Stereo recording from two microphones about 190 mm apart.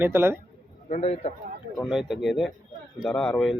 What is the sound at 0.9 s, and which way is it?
Speech, 35° left (ahead or behind).